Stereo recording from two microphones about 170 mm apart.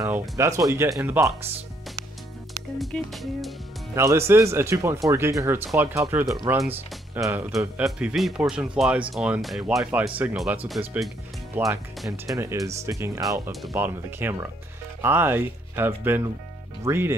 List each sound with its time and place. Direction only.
0.0 s speech: 15° right (ahead or behind)
2.8 s speech: centre (ahead or behind)
3.9 s speech: 15° right (ahead or behind)
13.5 s speech: centre (ahead or behind)
13.7 s speech: 15° right (ahead or behind)